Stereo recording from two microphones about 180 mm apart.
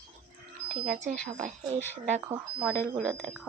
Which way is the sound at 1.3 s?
40° right (ahead or behind).